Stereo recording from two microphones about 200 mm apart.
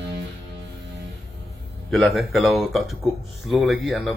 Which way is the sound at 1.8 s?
Centre (ahead or behind).